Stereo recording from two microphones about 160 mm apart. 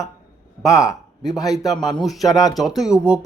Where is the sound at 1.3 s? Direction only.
20° left (ahead or behind).